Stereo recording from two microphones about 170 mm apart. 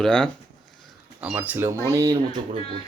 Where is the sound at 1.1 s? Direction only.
10° right (ahead or behind).